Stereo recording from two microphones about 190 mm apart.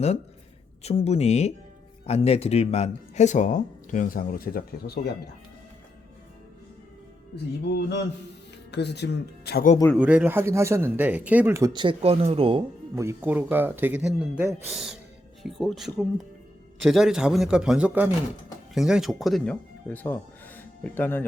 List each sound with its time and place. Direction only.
0.8 s speech: 35° left (ahead or behind); by 5.1 s 55° left (ahead or behind)
7.6 s speech: 60° left (ahead or behind)
10.0 s speech: 5° right (ahead or behind); by 12.6 s 30° right (ahead or behind)
13.0 s a man's voice: 10° right (ahead or behind); by 21.2 s 10° left (ahead or behind)